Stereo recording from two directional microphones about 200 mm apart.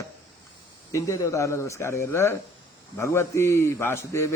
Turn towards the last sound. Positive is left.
turn(degrees=15)  # may be behind; listen again after turning